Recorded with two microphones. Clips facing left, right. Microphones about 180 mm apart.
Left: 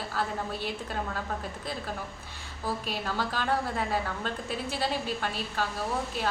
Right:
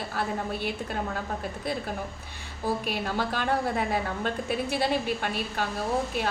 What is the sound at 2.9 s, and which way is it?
A woman's voice, 15° right (ahead or behind).